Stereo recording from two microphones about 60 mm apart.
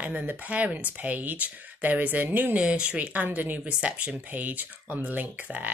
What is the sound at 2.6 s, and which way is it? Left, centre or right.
Speech, centre.